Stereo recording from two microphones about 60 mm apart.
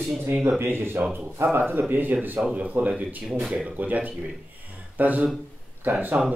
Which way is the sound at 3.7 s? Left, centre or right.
Right.